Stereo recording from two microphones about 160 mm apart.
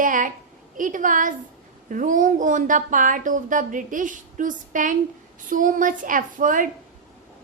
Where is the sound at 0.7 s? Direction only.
55° right (ahead or behind).